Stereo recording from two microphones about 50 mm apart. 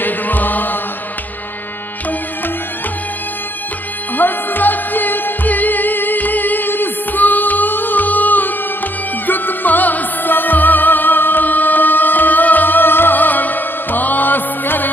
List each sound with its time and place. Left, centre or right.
0.0 s chant: left
4.2 s music: left